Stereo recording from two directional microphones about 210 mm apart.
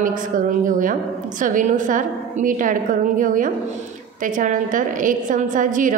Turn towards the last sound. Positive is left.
turn(degrees=-40)  # may be behind; listen again after turning